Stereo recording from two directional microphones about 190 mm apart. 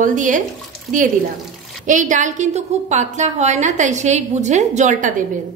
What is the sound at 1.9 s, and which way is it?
A woman's voice, 40° right (ahead or behind).